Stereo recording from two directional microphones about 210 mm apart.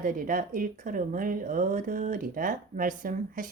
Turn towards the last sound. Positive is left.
turn(degrees=-40)  # may be behind; listen again after turning